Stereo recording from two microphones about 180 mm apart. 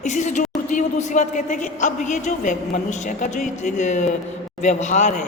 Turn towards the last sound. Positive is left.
turn(degrees=45)  # may be behind; listen again after turning